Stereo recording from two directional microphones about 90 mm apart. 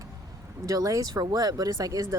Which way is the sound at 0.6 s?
40° right (ahead or behind).